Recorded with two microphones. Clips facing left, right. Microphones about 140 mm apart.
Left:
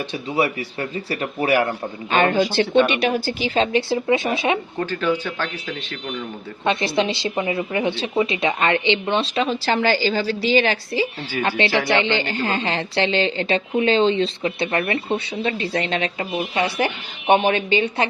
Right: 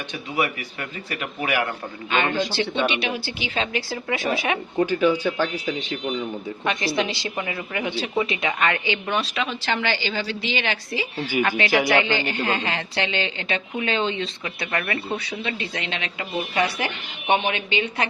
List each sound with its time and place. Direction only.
0.3 s speech: 30° left (ahead or behind)
2.4 s speech: 55° left (ahead or behind); by 4.6 s 25° left (ahead or behind)
4.8 s speech: 15° right (ahead or behind)
6.7 s a woman's voice: 25° left (ahead or behind)
16.6 s a woman's voice: 25° left (ahead or behind)
17.2 s speech: 40° left (ahead or behind)